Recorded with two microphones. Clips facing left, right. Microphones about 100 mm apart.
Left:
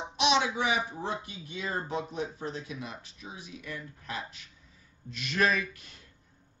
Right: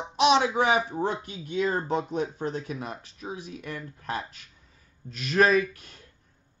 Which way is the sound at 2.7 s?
40° right (ahead or behind).